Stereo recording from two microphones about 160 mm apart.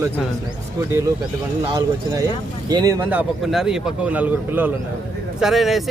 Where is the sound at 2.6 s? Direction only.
25° right (ahead or behind).